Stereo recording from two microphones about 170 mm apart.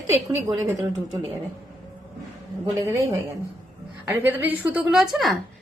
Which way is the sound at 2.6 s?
20° right (ahead or behind).